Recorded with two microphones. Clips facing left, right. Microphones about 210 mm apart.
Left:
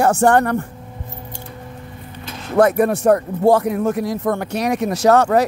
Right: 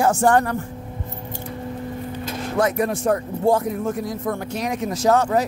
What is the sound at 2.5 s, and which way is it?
Speech, 60° left (ahead or behind).